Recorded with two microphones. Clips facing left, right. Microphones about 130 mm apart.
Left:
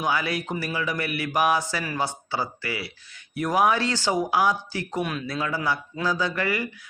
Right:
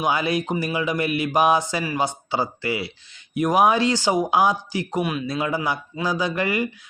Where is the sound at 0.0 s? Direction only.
20° right (ahead or behind).